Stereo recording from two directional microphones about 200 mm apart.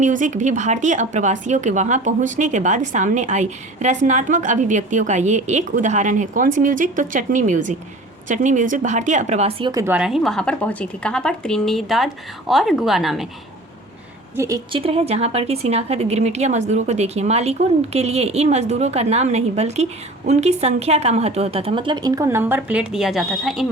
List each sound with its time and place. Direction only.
0.0 s a woman's voice: 40° right (ahead or behind)
9.8 s speech: 5° right (ahead or behind)
14.3 s a woman's voice: 15° right (ahead or behind); by 23.6 s centre (ahead or behind)